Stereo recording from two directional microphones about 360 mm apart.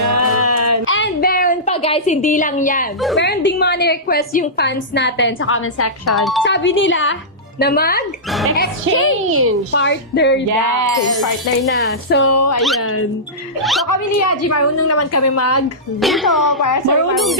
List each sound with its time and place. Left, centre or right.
0.1 s a sound: right
0.9 s a sound: left
3.2 s a woman's voice: left
6.1 s speech: centre
6.4 s a woman's voice: left
8.3 s speech: centre
8.5 s a woman's voice: left
11.7 s a woman's voice: left
12.3 s a woman's voice: left
13.6 s speech: centre
13.8 s a woman's voice: left
16.0 s speech: centre
16.5 s a woman's voice: left